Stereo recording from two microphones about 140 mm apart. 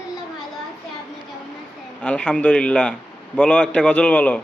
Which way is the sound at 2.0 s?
10° left (ahead or behind).